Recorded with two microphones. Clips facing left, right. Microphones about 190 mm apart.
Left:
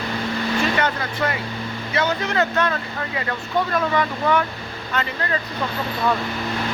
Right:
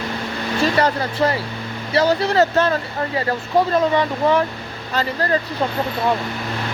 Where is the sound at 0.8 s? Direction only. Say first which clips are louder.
Right 5 dB; 35° right (ahead or behind).